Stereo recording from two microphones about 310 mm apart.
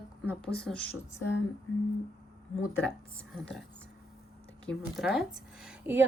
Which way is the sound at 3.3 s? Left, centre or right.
Centre.